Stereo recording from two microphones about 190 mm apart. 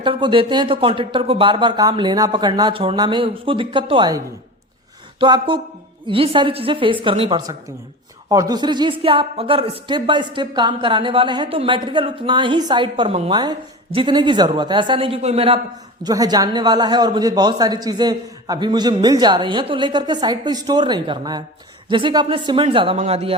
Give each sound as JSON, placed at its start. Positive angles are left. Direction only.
{"t": 0.0, "sound": "speech", "side_deg": -25}
{"t": 5.2, "sound": "speech", "side_deg": -25}
{"t": 16.0, "sound": "speech", "side_deg": -20}